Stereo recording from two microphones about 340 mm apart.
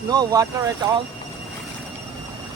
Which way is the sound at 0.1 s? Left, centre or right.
Centre.